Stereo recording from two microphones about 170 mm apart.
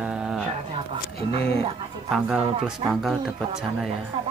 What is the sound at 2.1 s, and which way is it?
Speech, 5° right (ahead or behind).